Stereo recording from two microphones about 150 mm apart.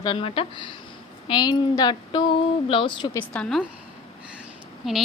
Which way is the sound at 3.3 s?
5° left (ahead or behind).